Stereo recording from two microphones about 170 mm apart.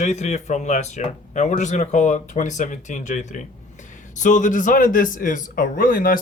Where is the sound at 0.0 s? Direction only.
40° left (ahead or behind).